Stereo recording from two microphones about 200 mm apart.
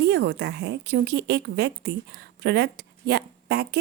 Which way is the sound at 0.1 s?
55° right (ahead or behind).